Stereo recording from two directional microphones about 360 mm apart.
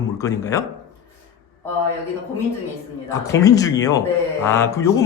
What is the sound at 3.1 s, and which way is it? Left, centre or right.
Speech, centre.